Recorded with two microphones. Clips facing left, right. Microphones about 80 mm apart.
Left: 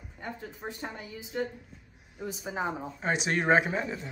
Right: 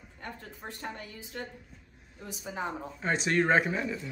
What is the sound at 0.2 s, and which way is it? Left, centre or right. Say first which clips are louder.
A woman's voice: left 4 dB; centre.